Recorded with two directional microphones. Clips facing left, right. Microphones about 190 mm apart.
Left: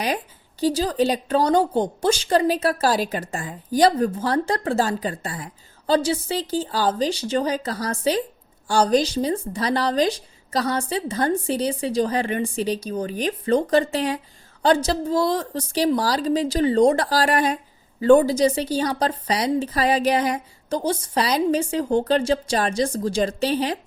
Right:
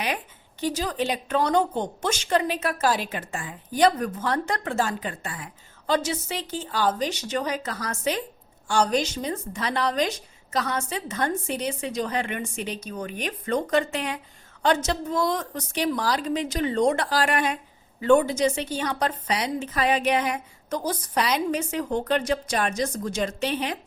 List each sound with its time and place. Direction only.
0.6 s a woman's voice: 35° left (ahead or behind)